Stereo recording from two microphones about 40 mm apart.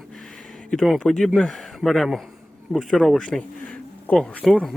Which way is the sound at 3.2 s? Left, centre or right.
Centre.